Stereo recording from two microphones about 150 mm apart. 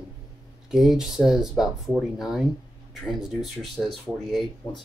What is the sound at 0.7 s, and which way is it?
Speech, 5° right (ahead or behind).